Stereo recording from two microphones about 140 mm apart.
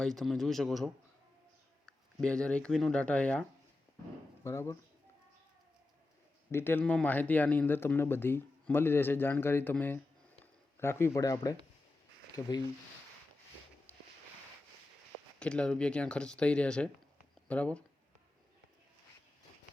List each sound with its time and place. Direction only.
0.0 s speech: centre (ahead or behind)
2.2 s speech: 5° left (ahead or behind)
4.4 s speech: 20° left (ahead or behind)
6.5 s speech: 15° left (ahead or behind)
15.4 s speech: 5° left (ahead or behind)